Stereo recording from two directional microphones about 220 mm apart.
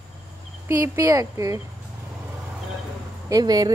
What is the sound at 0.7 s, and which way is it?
Speech, 15° right (ahead or behind).